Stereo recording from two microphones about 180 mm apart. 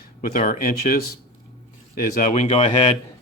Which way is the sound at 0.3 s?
50° left (ahead or behind).